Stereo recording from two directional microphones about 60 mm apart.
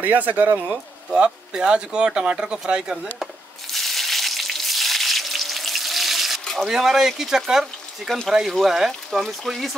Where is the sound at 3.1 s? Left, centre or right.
Centre.